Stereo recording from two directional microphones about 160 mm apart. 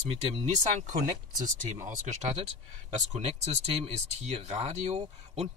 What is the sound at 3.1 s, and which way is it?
Speech, 45° right (ahead or behind).